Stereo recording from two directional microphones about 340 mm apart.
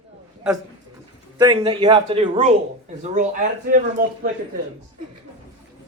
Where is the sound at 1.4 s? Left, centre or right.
Centre.